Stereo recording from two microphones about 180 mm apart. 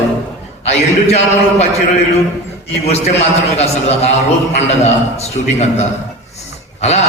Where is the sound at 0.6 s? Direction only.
35° left (ahead or behind).